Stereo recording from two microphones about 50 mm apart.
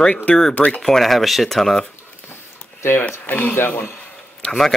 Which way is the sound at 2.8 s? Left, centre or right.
Left.